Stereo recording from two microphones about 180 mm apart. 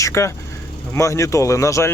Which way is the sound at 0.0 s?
15° left (ahead or behind).